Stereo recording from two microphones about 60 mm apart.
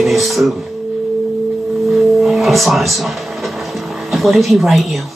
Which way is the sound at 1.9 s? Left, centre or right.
Centre.